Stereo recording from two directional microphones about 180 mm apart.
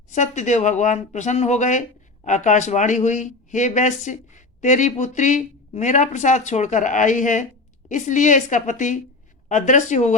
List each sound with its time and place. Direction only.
0.1 s speech: 40° left (ahead or behind)